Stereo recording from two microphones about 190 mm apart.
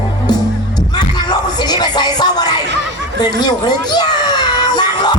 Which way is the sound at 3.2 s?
20° left (ahead or behind).